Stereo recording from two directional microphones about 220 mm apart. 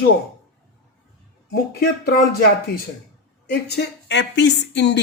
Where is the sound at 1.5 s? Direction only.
45° left (ahead or behind).